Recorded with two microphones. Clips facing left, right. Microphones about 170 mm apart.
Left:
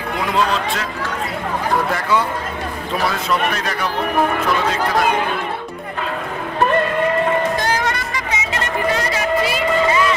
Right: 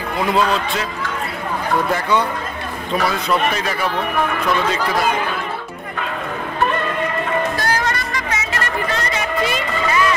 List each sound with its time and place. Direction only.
1.9 s a man's voice: centre (ahead or behind)
7.5 s music: 20° left (ahead or behind)